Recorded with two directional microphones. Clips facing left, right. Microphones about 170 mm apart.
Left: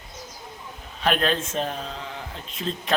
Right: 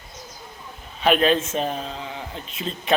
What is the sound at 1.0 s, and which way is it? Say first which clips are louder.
A man's voice: right 5 dB; 5° right (ahead or behind).